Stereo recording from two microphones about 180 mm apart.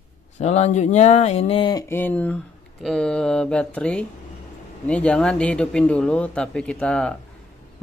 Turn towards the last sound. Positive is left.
turn(degrees=5)  # may be behind; listen again after turning